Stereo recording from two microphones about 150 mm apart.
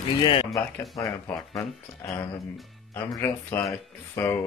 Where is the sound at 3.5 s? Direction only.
10° left (ahead or behind).